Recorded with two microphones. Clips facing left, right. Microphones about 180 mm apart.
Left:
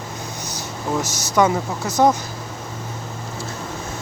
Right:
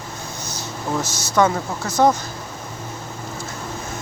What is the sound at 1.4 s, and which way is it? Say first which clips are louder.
Speech: left 1 dB; 15° left (ahead or behind).